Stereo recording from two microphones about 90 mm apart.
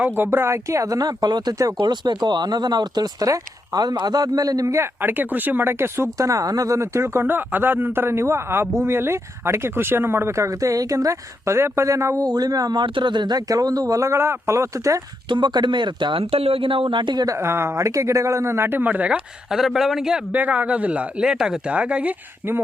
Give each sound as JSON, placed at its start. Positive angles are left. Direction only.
{"t": 0.0, "sound": "speech", "side_deg": -25}
{"t": 1.8, "sound": "speech", "side_deg": -55}
{"t": 4.9, "sound": "speech", "side_deg": -20}
{"t": 12.8, "sound": "speech", "side_deg": -65}
{"t": 15.3, "sound": "speech", "side_deg": -55}
{"t": 16.3, "sound": "speech", "side_deg": -90}
{"t": 17.2, "sound": "speech", "side_deg": -30}
{"t": 19.5, "sound": "a man's voice", "side_deg": -5}
{"t": 20.3, "sound": "speech", "side_deg": -20}